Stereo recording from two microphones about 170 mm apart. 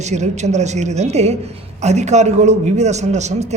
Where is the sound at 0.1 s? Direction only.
40° right (ahead or behind).